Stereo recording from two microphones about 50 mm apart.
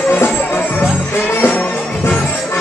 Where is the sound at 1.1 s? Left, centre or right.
Left.